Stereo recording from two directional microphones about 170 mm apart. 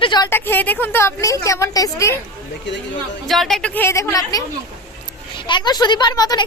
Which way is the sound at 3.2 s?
Centre (ahead or behind).